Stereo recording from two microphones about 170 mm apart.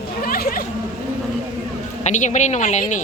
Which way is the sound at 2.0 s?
45° left (ahead or behind).